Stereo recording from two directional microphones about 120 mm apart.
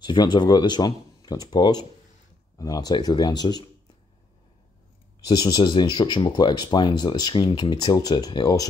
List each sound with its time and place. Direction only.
0.0 s speech: 40° left (ahead or behind)
5.2 s speech: 35° left (ahead or behind)